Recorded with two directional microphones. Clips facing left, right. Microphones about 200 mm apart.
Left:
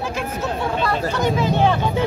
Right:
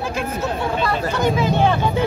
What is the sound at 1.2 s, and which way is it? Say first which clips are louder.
Speech: right 1 dB; centre (ahead or behind).